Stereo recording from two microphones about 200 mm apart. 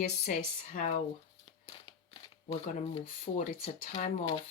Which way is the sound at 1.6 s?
25° left (ahead or behind).